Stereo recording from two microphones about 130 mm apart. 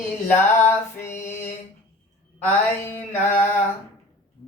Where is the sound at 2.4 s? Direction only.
15° left (ahead or behind).